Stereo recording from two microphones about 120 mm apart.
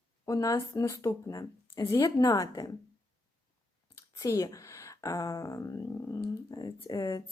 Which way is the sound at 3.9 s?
25° left (ahead or behind).